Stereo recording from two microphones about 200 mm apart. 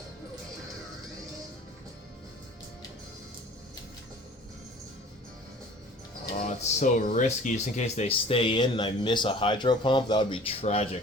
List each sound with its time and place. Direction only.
6.6 s speech: 35° left (ahead or behind)